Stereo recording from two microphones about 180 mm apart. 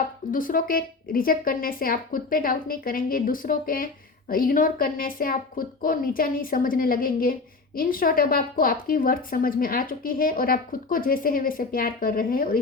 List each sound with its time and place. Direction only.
0.3 s a woman's voice: 50° left (ahead or behind)